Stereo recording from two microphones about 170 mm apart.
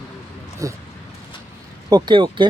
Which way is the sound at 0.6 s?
20° right (ahead or behind).